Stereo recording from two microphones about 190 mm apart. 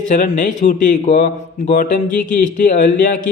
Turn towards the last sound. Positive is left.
turn(degrees=45)  # may be behind; listen again after turning